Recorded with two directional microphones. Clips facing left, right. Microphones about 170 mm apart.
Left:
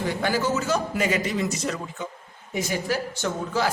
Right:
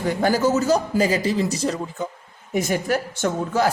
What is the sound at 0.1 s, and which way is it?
A man's voice, 45° right (ahead or behind).